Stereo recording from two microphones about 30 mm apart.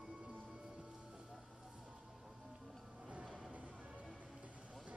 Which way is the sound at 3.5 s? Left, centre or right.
Right.